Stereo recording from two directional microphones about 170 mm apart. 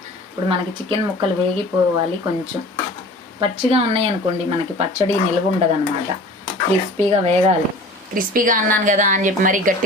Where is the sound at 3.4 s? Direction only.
35° right (ahead or behind).